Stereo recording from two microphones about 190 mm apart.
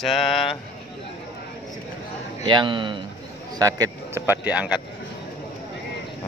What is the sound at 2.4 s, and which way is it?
Speech, 25° right (ahead or behind).